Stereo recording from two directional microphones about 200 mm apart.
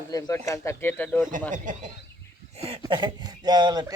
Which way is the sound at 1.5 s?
40° right (ahead or behind).